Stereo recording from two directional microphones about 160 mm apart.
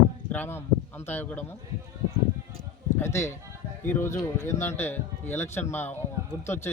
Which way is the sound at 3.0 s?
15° left (ahead or behind).